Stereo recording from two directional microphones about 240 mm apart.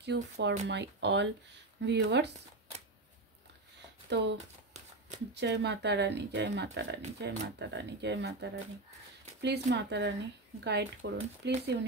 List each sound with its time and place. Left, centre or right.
0.0 s speech: right
4.1 s speech: right